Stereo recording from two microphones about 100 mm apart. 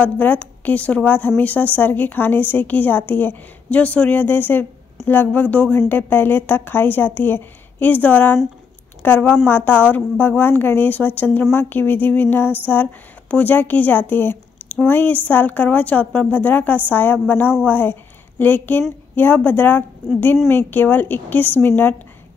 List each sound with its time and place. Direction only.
0.0 s a woman's voice: 15° left (ahead or behind)